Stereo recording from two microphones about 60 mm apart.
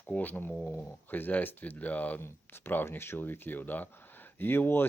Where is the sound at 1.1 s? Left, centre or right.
Left.